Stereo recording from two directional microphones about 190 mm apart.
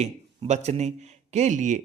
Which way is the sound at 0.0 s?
35° right (ahead or behind).